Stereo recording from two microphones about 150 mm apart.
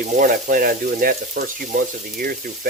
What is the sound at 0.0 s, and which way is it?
Speech, 70° right (ahead or behind).